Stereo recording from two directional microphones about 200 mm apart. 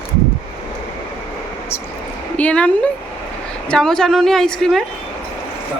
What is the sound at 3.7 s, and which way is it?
A woman's voice, 5° left (ahead or behind).